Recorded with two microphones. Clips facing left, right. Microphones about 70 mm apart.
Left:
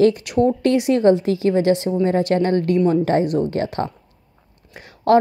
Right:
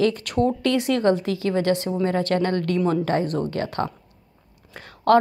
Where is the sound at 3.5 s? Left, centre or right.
Left.